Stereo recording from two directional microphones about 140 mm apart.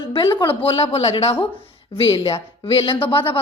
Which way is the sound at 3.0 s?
40° left (ahead or behind).